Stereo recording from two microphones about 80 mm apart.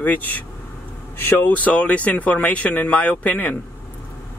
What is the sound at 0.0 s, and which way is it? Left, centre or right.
Speech, left.